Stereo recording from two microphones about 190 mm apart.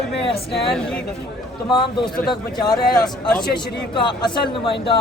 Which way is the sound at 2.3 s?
20° left (ahead or behind).